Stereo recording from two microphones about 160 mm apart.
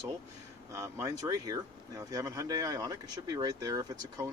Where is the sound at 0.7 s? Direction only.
20° right (ahead or behind).